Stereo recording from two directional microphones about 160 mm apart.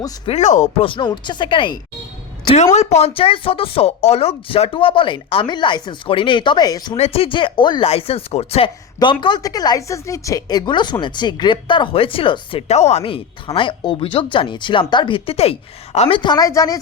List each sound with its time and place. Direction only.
0.3 s speech: 45° left (ahead or behind)
0.9 s speech: 30° left (ahead or behind)
2.7 s speech: 40° left (ahead or behind); by 6.9 s 25° left (ahead or behind)
6.9 s speech: 40° left (ahead or behind); by 16.7 s 20° left (ahead or behind)